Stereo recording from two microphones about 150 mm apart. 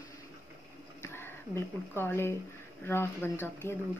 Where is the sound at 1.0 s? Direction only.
15° left (ahead or behind).